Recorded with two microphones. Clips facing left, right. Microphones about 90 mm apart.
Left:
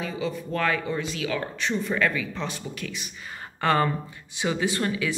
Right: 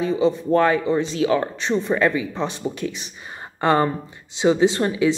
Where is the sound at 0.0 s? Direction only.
25° right (ahead or behind).